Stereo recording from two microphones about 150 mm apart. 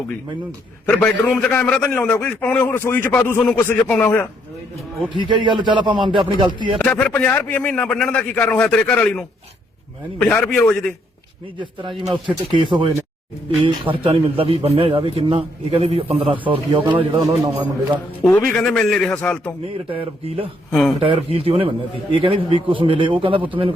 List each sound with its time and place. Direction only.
0.9 s a man's voice: 10° left (ahead or behind)
5.0 s a man's voice: 30° right (ahead or behind)
6.7 s a man's voice: 5° left (ahead or behind)
11.6 s a man's voice: 35° right (ahead or behind)
18.2 s a man's voice: 10° left (ahead or behind)
19.9 s a man's voice: 40° right (ahead or behind)
20.7 s speech: centre (ahead or behind)
21.0 s a man's voice: 40° right (ahead or behind)